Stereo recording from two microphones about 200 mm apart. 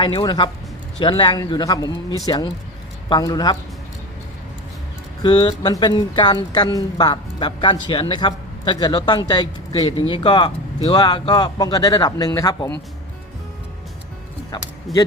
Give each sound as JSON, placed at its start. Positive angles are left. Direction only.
{"t": 0.0, "sound": "speech", "side_deg": 25}
{"t": 5.2, "sound": "speech", "side_deg": 20}
{"t": 14.5, "sound": "speech", "side_deg": 20}
{"t": 14.9, "sound": "speech", "side_deg": 0}